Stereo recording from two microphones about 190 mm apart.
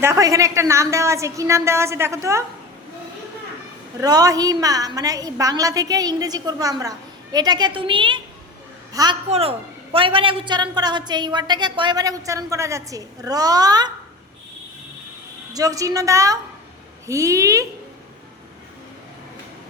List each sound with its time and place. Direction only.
0.0 s a woman's voice: 15° right (ahead or behind)
4.0 s a woman's voice: 20° right (ahead or behind)
9.3 s a woman's voice: 30° right (ahead or behind)
15.5 s a woman's voice: 20° right (ahead or behind)